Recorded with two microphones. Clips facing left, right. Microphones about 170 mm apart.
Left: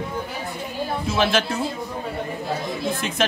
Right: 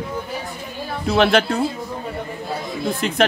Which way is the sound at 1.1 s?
60° right (ahead or behind).